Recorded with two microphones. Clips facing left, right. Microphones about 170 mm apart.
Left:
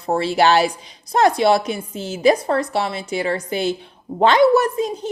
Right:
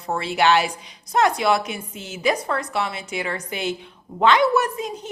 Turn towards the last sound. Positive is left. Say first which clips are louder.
# left 6 dB
turn(degrees=35)  # may be behind; listen again after turning